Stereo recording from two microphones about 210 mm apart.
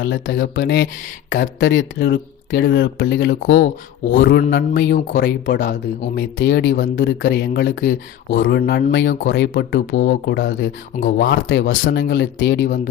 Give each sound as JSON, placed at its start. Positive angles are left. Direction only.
{"t": 0.0, "sound": "speech", "side_deg": 60}
{"t": 0.6, "sound": "speech", "side_deg": 50}
{"t": 5.5, "sound": "speech", "side_deg": 40}
{"t": 6.1, "sound": "speech", "side_deg": 60}